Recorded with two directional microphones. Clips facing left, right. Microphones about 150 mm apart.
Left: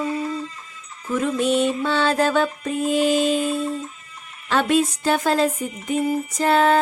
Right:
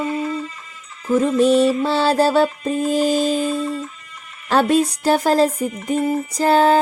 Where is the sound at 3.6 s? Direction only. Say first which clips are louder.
Right 2 dB; 90° right.